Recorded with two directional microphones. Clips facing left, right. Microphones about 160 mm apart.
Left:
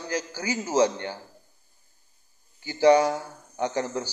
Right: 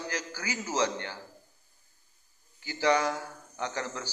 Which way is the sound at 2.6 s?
20° left (ahead or behind).